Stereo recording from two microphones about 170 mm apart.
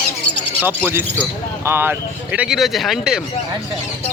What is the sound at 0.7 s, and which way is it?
Speech, 10° right (ahead or behind).